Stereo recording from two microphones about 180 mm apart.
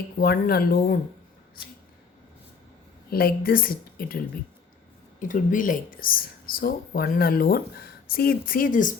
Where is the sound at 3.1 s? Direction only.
55° left (ahead or behind).